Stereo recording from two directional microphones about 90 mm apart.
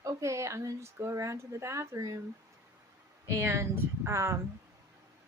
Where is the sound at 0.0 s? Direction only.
35° right (ahead or behind).